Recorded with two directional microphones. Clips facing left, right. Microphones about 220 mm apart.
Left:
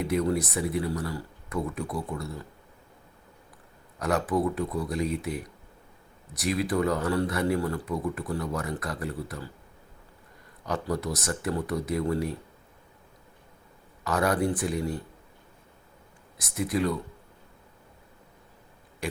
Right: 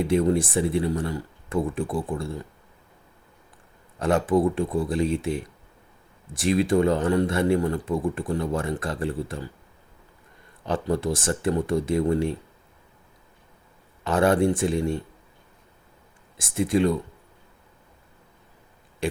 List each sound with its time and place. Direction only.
0.0 s speech: 25° right (ahead or behind)
3.9 s speech: 25° right (ahead or behind)
10.7 s speech: 30° right (ahead or behind)
14.0 s speech: 25° right (ahead or behind)
16.6 s speech: 25° right (ahead or behind)